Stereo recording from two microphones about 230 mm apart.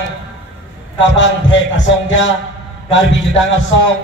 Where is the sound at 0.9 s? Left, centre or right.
Left.